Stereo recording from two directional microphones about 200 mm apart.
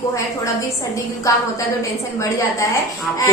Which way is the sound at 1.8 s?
15° left (ahead or behind).